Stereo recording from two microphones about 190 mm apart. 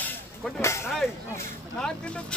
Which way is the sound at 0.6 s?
15° left (ahead or behind).